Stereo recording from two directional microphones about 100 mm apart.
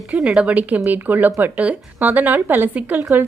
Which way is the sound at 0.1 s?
10° right (ahead or behind).